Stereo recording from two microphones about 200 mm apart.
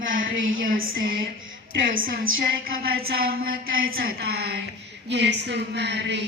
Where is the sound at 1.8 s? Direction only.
75° right (ahead or behind).